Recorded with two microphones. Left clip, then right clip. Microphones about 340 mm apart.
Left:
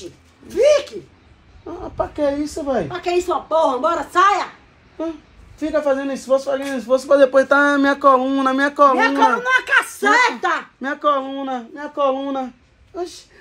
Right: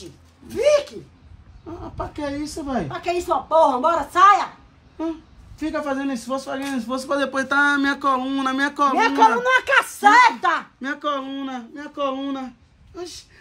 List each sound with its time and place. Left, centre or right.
0.5 s a sound: centre
1.8 s a woman's voice: centre
2.9 s speech: centre
5.6 s a man's voice: centre
8.9 s speech: right
10.8 s speech: centre